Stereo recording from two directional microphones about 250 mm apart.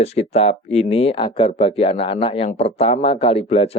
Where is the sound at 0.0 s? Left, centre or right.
Left.